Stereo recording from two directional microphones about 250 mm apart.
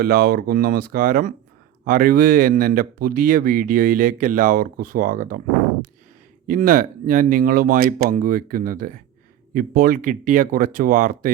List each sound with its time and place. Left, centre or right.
0.0 s speech: right
6.5 s speech: right